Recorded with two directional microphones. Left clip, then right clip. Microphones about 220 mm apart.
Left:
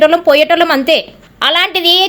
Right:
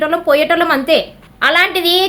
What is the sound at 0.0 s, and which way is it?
A woman's voice, 25° left (ahead or behind).